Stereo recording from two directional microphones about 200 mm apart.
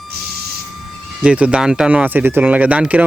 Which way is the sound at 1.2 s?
5° right (ahead or behind).